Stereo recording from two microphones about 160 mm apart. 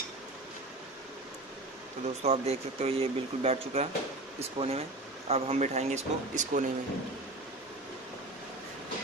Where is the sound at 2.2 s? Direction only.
40° right (ahead or behind).